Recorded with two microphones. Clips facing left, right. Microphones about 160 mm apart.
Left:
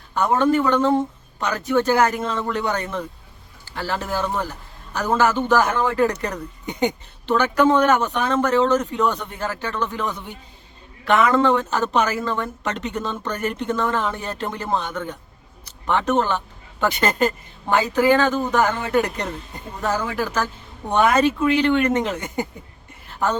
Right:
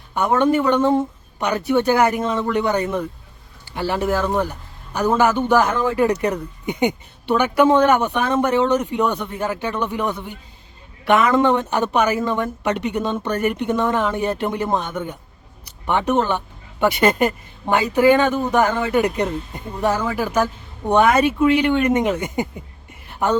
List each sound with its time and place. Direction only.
0.1 s a woman's voice: 15° right (ahead or behind)